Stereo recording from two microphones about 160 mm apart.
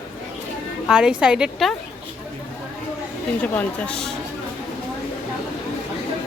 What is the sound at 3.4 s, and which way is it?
Speech, 10° left (ahead or behind).